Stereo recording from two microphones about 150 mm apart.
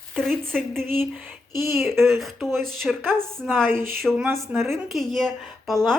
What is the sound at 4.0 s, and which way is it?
A woman's voice, centre (ahead or behind).